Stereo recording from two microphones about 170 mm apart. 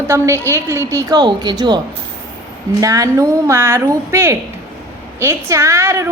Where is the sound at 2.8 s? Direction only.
20° right (ahead or behind).